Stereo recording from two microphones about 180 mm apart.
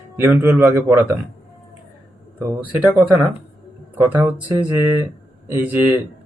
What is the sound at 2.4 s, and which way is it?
Speech, 10° right (ahead or behind).